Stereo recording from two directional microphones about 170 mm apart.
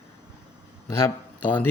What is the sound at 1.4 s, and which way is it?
Speech, 10° left (ahead or behind).